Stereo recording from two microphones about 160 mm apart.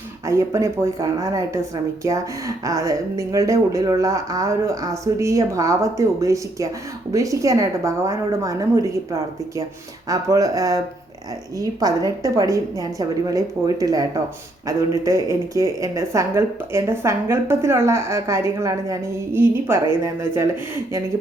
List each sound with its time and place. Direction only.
0.3 s speech: 20° right (ahead or behind)
2.6 s speech: 20° right (ahead or behind)
10.1 s a woman's voice: 20° right (ahead or behind)